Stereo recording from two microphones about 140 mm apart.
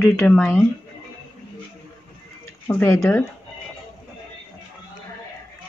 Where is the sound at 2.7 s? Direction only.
15° left (ahead or behind).